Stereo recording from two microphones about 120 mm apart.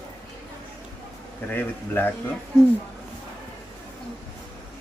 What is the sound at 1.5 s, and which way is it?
Speech, 15° left (ahead or behind).